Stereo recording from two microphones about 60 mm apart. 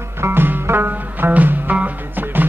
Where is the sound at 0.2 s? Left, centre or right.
Right.